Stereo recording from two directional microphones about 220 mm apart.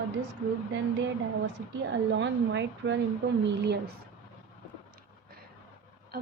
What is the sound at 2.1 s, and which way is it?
Speech, 55° right (ahead or behind).